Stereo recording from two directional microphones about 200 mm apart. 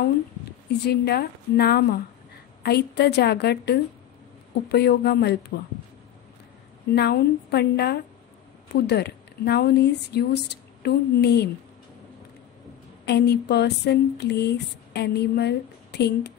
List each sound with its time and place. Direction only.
0.0 s speech: 55° left (ahead or behind)
6.9 s speech: 55° left (ahead or behind)
13.0 s speech: 55° left (ahead or behind)